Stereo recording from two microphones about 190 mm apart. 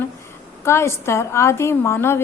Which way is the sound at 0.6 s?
15° left (ahead or behind).